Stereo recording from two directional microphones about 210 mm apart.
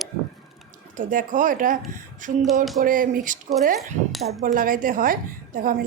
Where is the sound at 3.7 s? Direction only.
Centre (ahead or behind).